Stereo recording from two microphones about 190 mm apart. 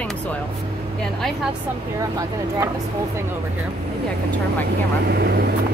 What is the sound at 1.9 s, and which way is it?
Speech, 20° right (ahead or behind).